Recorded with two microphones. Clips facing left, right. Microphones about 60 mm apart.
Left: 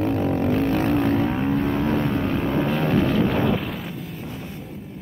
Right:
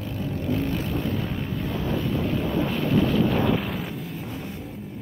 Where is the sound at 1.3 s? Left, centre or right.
Left.